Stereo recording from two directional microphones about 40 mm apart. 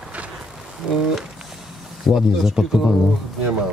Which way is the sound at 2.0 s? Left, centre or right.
Centre.